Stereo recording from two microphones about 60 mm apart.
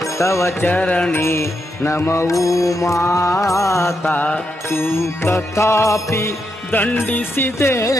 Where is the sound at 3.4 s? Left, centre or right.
Left.